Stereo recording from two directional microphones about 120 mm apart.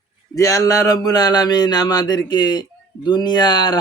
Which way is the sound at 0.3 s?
25° left (ahead or behind).